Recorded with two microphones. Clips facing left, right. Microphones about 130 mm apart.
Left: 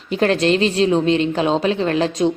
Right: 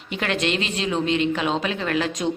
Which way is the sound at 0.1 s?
35° left (ahead or behind).